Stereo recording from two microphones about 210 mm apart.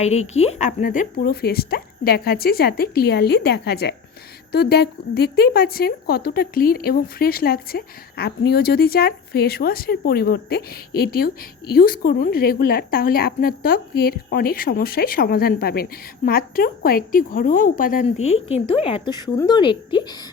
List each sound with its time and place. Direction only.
0.0 s speech: 30° left (ahead or behind)
18.5 s speech: 30° left (ahead or behind)